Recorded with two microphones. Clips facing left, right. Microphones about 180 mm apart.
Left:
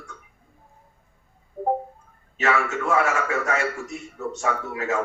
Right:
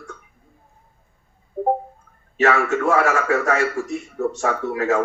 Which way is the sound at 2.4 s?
40° right (ahead or behind).